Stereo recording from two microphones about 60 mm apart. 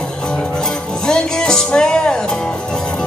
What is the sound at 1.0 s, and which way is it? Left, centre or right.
Music, centre.